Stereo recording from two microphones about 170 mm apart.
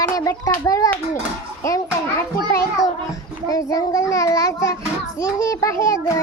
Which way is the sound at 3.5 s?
20° left (ahead or behind).